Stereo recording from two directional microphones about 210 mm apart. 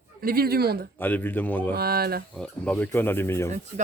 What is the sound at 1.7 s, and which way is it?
Speech, 45° right (ahead or behind).